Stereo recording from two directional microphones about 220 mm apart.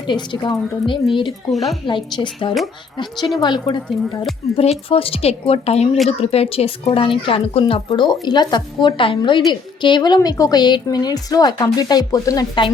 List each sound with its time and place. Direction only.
0.1 s speech: 20° left (ahead or behind)
1.5 s speech: centre (ahead or behind)
1.9 s a woman's voice: 20° left (ahead or behind)